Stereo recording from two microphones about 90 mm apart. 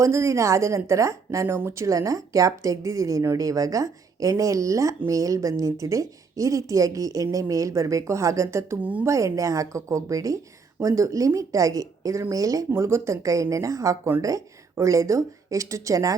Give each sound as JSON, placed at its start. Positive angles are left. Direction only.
{"t": 0.0, "sound": "a woman's voice", "side_deg": -30}
{"t": 8.8, "sound": "speech", "side_deg": -15}
{"t": 9.0, "sound": "a woman's voice", "side_deg": -35}